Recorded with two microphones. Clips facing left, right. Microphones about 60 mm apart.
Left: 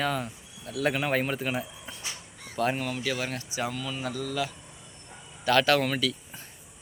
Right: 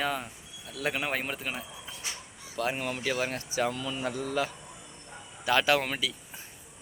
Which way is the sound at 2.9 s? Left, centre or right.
Right.